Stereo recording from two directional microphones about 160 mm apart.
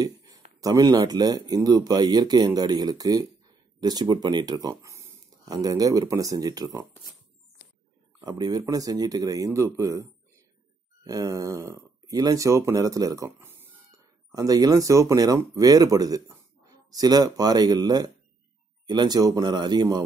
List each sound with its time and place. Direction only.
0.0 s a sound: 25° right (ahead or behind)
0.6 s speech: 25° right (ahead or behind)
8.2 s speech: 25° right (ahead or behind)